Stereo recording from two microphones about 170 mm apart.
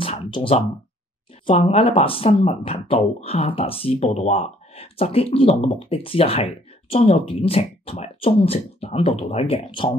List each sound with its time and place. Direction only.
0.0 s speech: 30° left (ahead or behind)